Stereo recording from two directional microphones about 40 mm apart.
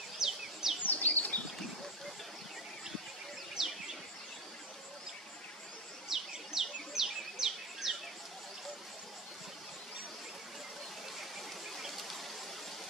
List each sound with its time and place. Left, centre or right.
0.2 s bird: centre
0.8 s bird: left
3.6 s bird: centre
6.0 s bird: centre
11.7 s a sound: centre